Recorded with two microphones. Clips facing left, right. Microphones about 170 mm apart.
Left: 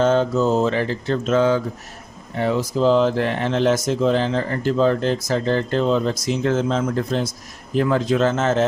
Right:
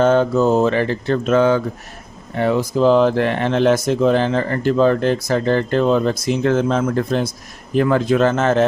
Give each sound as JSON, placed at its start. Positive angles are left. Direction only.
{"t": 0.0, "sound": "speech", "side_deg": -60}